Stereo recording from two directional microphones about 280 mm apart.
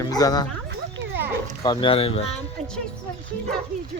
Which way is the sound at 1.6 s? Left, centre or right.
Centre.